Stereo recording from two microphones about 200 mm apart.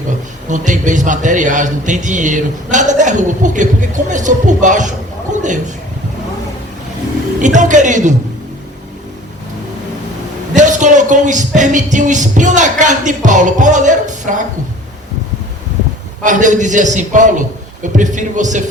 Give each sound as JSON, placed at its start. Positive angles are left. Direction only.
{"t": 0.5, "sound": "a man's voice", "side_deg": -40}
{"t": 7.4, "sound": "a man's voice", "side_deg": -40}
{"t": 10.5, "sound": "a man's voice", "side_deg": -40}
{"t": 16.2, "sound": "a man's voice", "side_deg": -40}